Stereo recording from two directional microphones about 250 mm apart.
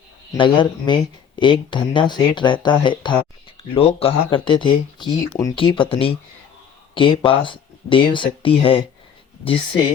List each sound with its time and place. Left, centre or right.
0.3 s speech: centre